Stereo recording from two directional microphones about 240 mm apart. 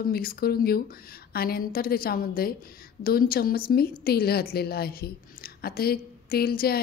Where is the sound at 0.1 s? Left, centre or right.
Left.